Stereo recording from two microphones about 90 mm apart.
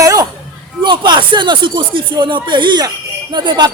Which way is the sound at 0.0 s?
40° right (ahead or behind).